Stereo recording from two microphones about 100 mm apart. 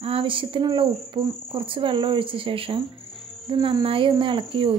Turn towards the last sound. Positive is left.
turn(degrees=-55)  # may be behind; listen again after turning